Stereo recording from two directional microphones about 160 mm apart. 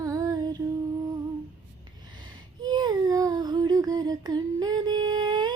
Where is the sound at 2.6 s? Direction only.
25° right (ahead or behind).